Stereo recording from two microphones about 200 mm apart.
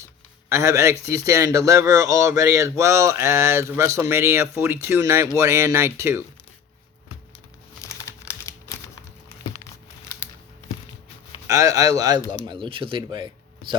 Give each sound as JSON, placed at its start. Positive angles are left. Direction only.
{"t": 0.5, "sound": "speech", "side_deg": -15}
{"t": 7.8, "sound": "crumpling", "side_deg": 15}
{"t": 11.4, "sound": "speech", "side_deg": -15}